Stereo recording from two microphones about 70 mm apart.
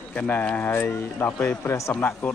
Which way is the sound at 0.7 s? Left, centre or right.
Left.